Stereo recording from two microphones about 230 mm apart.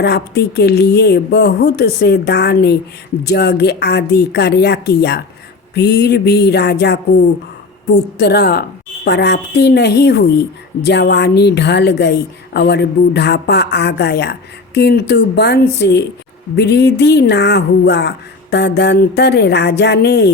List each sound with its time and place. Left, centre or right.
0.0 s a woman's voice: left